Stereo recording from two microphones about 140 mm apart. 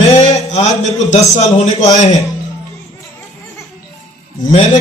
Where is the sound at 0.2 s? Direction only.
55° left (ahead or behind).